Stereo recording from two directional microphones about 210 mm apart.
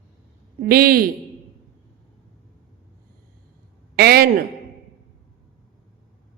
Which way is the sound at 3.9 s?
45° right (ahead or behind).